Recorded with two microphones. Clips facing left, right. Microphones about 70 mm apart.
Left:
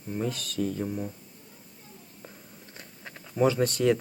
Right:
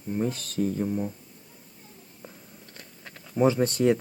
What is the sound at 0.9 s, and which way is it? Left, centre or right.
Speech, centre.